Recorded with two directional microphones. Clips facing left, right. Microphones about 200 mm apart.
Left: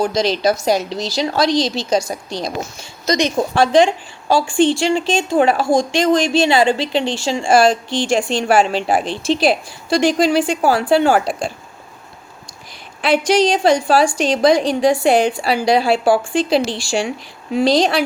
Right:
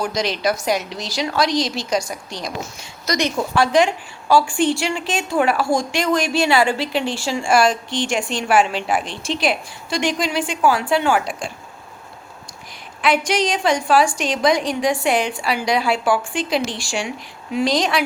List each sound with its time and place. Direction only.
0.0 s a woman's voice: 30° left (ahead or behind)
13.0 s a woman's voice: 30° left (ahead or behind)